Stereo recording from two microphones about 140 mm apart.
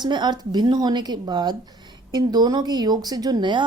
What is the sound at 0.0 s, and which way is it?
Speech, 30° right (ahead or behind).